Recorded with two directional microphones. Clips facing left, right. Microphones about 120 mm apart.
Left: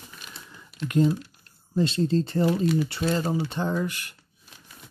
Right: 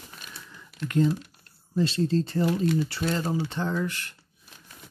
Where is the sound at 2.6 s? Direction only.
10° left (ahead or behind).